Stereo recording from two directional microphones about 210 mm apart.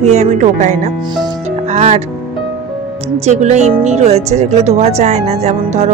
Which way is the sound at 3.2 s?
30° right (ahead or behind).